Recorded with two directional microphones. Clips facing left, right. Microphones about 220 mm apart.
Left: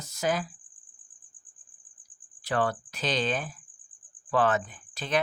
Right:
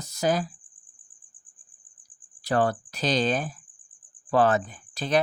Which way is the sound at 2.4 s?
40° right (ahead or behind).